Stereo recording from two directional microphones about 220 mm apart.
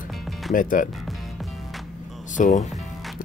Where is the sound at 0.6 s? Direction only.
40° left (ahead or behind).